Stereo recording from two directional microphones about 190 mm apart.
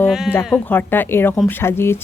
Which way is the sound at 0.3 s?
10° left (ahead or behind).